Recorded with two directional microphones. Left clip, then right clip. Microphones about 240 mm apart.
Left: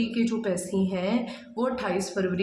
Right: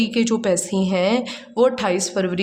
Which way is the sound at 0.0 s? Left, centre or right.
Right.